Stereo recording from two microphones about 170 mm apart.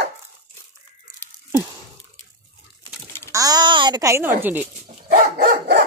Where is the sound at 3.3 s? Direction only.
20° right (ahead or behind).